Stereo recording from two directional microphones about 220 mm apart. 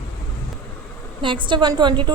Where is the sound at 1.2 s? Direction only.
20° right (ahead or behind).